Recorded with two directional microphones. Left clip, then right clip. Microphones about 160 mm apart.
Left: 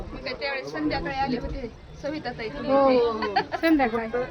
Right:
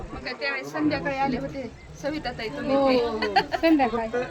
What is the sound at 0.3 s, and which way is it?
A woman's voice, 85° right.